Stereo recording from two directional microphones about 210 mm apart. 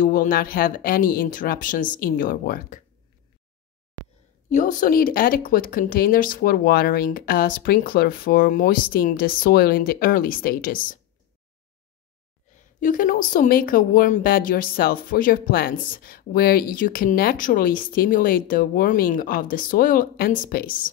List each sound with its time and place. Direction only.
0.0 s speech: 40° left (ahead or behind)
4.5 s a woman's voice: 35° left (ahead or behind)
12.8 s a woman's voice: 40° left (ahead or behind)